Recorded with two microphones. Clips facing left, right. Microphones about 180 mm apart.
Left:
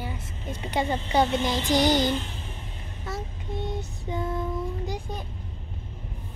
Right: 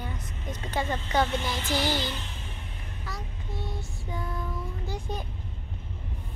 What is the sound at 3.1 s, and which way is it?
Child singing, 20° left (ahead or behind).